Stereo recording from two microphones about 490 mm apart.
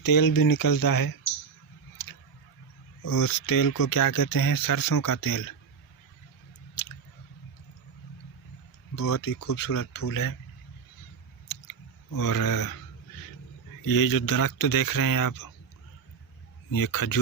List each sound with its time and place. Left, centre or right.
0.0 s speech: left
2.0 s tick-tock: left
3.0 s speech: left
6.8 s squish: left
9.0 s speech: left
11.7 s a sound: left
13.8 s speech: left
16.7 s speech: left